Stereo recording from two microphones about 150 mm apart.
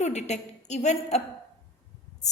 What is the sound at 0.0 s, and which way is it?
A woman's voice, 50° left (ahead or behind).